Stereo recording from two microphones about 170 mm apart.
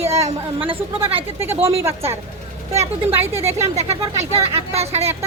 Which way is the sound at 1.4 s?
15° right (ahead or behind).